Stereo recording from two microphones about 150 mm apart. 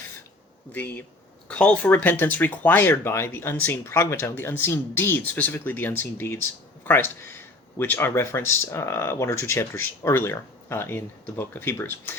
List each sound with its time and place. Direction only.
0.7 s speech: 10° left (ahead or behind)